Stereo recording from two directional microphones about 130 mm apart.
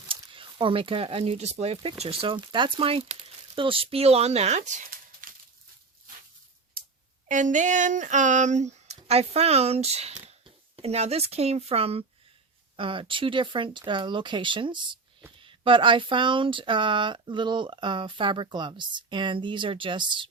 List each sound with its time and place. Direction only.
0.1 s speech: 40° right (ahead or behind); by 5.3 s 85° right
7.3 s speech: 75° right (ahead or behind); by 20.2 s 40° right (ahead or behind)